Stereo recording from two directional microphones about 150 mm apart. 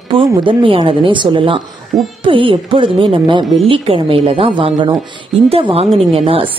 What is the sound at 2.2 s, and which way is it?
Speech, 35° right (ahead or behind).